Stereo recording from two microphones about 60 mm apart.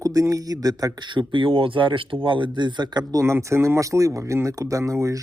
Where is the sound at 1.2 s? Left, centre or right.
Right.